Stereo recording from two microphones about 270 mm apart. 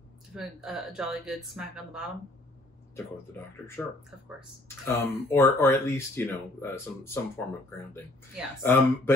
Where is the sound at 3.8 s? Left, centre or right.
Centre.